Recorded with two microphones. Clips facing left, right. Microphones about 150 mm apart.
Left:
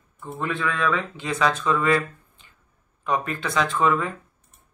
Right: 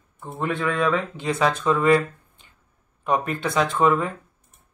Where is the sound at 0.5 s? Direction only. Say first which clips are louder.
Right 3 dB; 30° right (ahead or behind).